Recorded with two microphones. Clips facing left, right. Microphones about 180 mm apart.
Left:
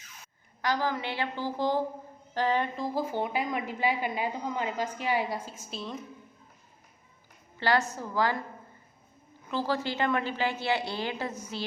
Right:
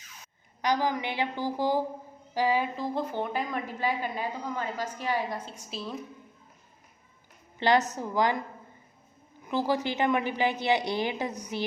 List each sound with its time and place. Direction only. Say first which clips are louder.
0.6 s a woman's voice: right 2 dB; 15° right (ahead or behind); by 6.0 s centre (ahead or behind)
7.6 s a woman's voice: right 3 dB; 20° right (ahead or behind)
9.5 s a woman's voice: right 2 dB; 15° right (ahead or behind)